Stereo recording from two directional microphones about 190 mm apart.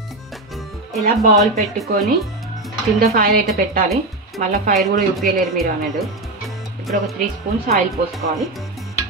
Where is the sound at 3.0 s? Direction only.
50° right (ahead or behind).